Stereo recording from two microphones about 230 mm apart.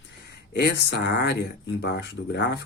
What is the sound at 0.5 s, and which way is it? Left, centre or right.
Speech, left.